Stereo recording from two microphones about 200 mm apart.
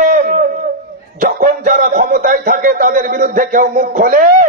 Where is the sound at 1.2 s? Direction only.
40° right (ahead or behind).